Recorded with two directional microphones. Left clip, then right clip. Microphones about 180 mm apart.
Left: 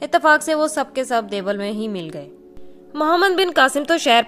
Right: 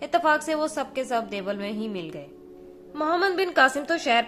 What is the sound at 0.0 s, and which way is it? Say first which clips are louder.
A woman's voice: left 7 dB; 40° left (ahead or behind).